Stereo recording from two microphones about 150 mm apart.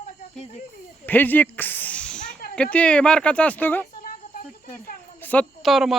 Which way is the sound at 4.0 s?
65° left (ahead or behind).